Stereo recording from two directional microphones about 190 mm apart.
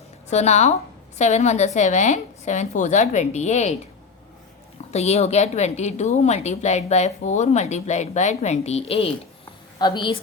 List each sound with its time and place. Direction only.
0.3 s a woman's voice: 35° left (ahead or behind)
4.9 s a woman's voice: 35° left (ahead or behind)